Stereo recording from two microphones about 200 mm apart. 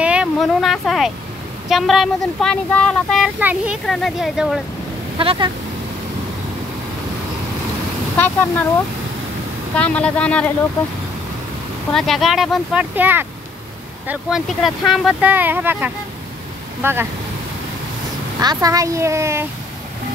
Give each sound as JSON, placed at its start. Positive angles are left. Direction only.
{"t": 0.0, "sound": "a sound", "side_deg": -5}
{"t": 1.7, "sound": "speech", "side_deg": 0}
{"t": 3.3, "sound": "speech", "side_deg": -10}
{"t": 5.1, "sound": "speech", "side_deg": -25}
{"t": 8.2, "sound": "speech", "side_deg": 10}
{"t": 11.9, "sound": "speech", "side_deg": 0}
{"t": 18.4, "sound": "speech", "side_deg": -20}